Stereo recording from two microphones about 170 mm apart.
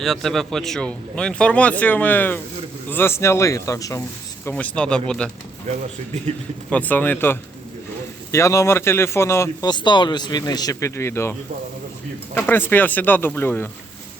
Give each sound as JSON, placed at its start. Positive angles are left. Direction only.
{"t": 0.0, "sound": "speech", "side_deg": 0}
{"t": 4.4, "sound": "speech", "side_deg": 10}
{"t": 6.7, "sound": "speech", "side_deg": 10}